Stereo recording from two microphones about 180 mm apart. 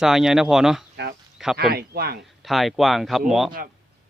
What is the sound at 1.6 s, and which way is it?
Speech, 60° right (ahead or behind).